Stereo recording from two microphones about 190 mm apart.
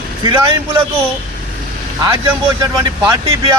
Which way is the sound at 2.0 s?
15° right (ahead or behind).